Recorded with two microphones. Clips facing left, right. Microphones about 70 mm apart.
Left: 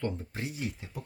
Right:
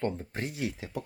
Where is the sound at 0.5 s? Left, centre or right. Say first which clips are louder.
Right 3 dB; right.